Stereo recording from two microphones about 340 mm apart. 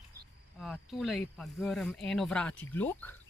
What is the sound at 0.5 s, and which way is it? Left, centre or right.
Speech, centre.